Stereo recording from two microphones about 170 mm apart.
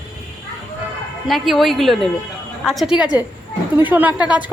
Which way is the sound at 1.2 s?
Centre (ahead or behind).